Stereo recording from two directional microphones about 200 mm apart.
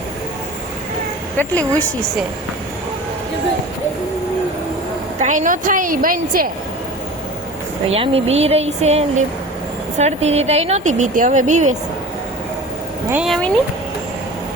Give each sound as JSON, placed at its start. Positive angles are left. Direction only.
{"t": 1.4, "sound": "speech", "side_deg": 10}
{"t": 5.2, "sound": "speech", "side_deg": -40}
{"t": 7.9, "sound": "speech", "side_deg": -30}
{"t": 13.1, "sound": "speech", "side_deg": -5}